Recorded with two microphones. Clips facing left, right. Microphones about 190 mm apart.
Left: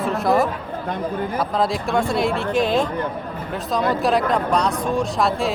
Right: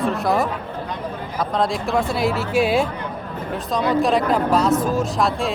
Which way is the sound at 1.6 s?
Centre (ahead or behind).